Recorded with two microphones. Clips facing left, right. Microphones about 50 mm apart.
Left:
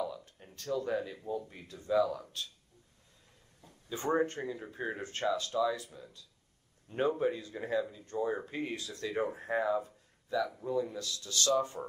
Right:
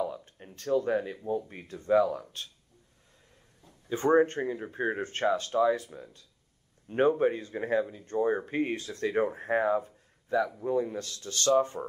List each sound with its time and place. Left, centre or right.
0.0 s a sound: right
0.6 s speech: right
3.6 s speech: right